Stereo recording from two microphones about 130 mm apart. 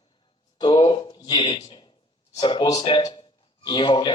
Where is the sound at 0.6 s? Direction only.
40° left (ahead or behind).